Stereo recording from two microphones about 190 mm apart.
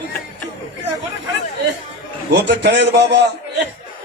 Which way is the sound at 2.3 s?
65° right (ahead or behind).